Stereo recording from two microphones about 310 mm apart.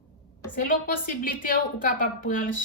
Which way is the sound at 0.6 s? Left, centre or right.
Left.